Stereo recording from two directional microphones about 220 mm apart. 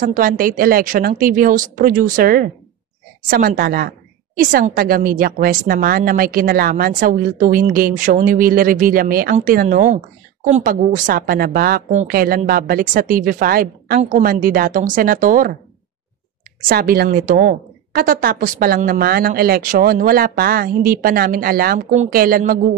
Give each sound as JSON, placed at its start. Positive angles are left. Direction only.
{"t": 0.0, "sound": "a woman's voice", "side_deg": -40}
{"t": 16.6, "sound": "a woman's voice", "side_deg": -45}